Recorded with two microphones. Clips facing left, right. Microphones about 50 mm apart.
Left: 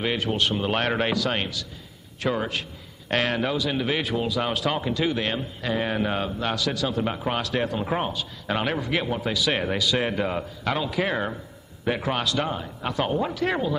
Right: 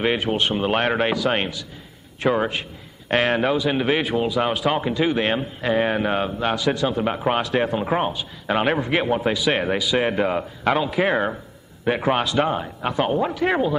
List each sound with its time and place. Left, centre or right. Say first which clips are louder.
0.0 s a man's voice: right 4 dB; right